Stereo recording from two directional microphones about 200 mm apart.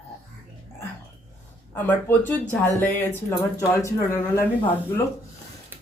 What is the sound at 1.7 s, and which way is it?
Speech, 10° left (ahead or behind).